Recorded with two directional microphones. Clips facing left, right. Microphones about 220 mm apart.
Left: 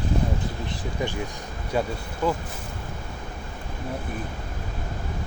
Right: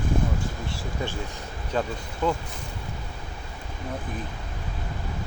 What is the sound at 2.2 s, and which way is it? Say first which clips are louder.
Speech: left 1 dB; 5° left (ahead or behind).